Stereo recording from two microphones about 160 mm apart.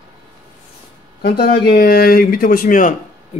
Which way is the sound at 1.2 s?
70° left (ahead or behind).